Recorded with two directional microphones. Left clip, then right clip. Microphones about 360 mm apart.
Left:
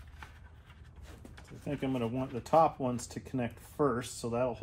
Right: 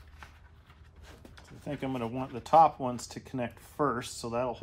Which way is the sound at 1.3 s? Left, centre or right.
Centre.